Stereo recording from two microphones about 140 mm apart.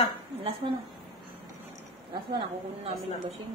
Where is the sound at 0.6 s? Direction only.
35° right (ahead or behind).